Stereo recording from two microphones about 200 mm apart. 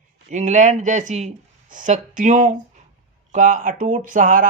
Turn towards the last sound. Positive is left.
turn(degrees=-45)  # may be behind; listen again after turning